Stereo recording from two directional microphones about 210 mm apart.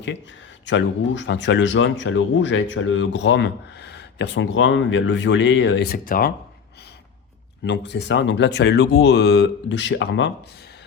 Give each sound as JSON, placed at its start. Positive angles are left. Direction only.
{"t": 0.6, "sound": "speech", "side_deg": 60}
{"t": 7.6, "sound": "speech", "side_deg": 55}